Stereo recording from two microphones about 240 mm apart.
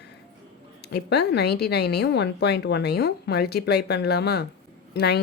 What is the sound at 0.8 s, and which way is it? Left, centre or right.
A woman's voice, left.